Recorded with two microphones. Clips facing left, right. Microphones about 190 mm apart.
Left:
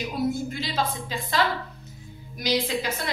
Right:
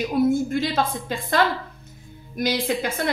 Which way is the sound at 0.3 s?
50° right (ahead or behind).